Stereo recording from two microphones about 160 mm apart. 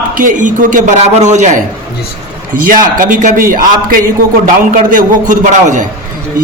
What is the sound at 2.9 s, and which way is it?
A man's voice, 55° right (ahead or behind).